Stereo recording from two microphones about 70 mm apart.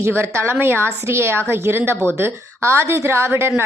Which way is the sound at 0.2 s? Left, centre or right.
Right.